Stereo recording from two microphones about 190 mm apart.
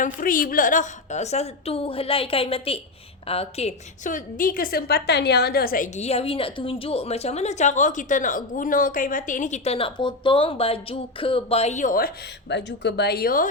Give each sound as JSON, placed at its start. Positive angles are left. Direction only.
{"t": 0.0, "sound": "a woman's voice", "side_deg": 45}